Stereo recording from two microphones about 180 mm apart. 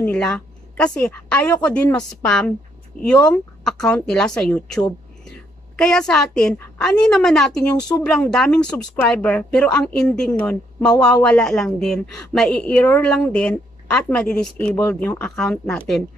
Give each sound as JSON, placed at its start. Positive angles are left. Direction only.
{"t": 0.0, "sound": "a woman's voice", "side_deg": 5}